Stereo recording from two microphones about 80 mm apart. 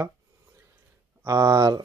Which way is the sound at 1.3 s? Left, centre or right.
Right.